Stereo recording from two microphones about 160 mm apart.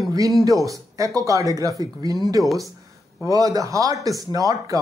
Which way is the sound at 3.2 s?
20° right (ahead or behind).